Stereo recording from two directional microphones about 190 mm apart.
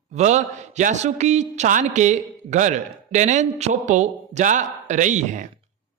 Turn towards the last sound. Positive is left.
turn(degrees=-40)  # may be behind; listen again after turning